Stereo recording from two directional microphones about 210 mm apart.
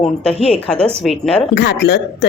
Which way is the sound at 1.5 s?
55° left (ahead or behind).